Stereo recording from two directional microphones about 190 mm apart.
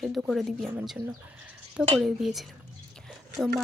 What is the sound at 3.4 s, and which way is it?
Speech, 25° right (ahead or behind).